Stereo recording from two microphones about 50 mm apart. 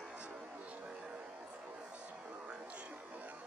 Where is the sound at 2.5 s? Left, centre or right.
Right.